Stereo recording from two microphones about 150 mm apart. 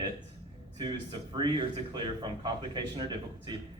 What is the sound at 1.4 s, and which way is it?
Speech, 30° right (ahead or behind).